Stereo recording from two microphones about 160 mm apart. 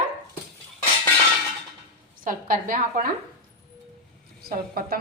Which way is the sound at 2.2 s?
60° right (ahead or behind).